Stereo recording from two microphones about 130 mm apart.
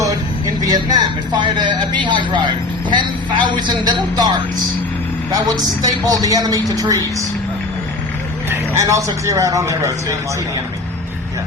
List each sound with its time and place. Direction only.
0.0 s a sound: 25° right (ahead or behind)
2.0 s speech: 40° right (ahead or behind)
5.8 s speech: 30° right (ahead or behind)
8.4 s speech: 25° right (ahead or behind)